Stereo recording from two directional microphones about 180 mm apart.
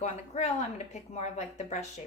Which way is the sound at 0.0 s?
40° left (ahead or behind).